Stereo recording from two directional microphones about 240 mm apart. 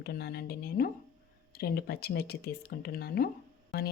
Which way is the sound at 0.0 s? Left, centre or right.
Left.